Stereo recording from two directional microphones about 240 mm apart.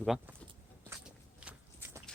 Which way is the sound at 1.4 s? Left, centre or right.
Centre.